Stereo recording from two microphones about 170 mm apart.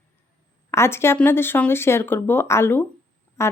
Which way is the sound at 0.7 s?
15° left (ahead or behind).